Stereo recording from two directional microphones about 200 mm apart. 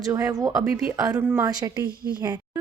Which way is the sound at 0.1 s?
15° right (ahead or behind).